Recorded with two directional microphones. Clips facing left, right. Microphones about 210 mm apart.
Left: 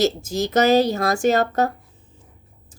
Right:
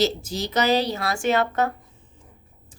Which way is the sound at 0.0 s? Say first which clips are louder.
Left 3 dB; 45° left (ahead or behind).